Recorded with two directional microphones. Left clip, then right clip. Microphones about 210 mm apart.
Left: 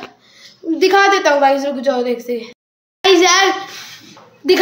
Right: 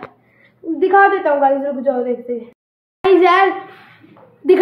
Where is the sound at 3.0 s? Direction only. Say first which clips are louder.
Even; 5° left (ahead or behind).